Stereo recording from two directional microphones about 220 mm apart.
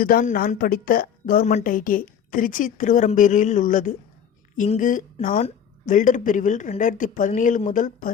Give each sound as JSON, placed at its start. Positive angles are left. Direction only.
{"t": 0.0, "sound": "a woman's voice", "side_deg": 40}